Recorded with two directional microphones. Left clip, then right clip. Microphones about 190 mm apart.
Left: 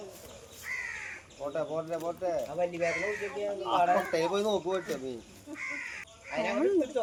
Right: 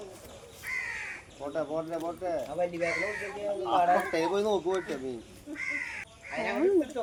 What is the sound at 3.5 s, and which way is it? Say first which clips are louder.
A man's voice: right 2 dB; 45° left (ahead or behind).